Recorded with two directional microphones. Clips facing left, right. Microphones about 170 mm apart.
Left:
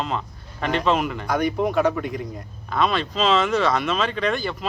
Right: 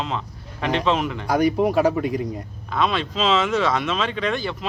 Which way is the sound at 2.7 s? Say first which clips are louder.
Even; centre (ahead or behind).